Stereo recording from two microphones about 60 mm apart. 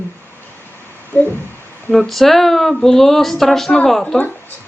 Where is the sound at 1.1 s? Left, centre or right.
Left.